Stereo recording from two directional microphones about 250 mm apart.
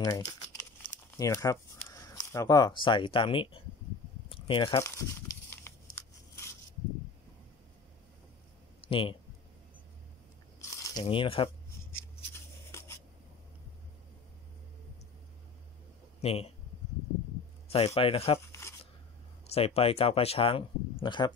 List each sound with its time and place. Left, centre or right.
0.0 s speech: centre
5.7 s scissors: centre
8.8 s a sound: left
10.6 s biting: centre
12.7 s a sound: centre
16.2 s speech: left
17.6 s speech: left
18.5 s a sound: centre
19.4 s speech: left